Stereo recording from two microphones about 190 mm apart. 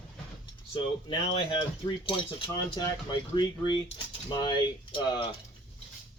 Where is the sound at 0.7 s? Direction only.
25° left (ahead or behind).